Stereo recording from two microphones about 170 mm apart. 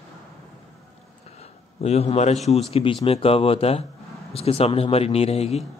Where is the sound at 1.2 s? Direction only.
40° left (ahead or behind).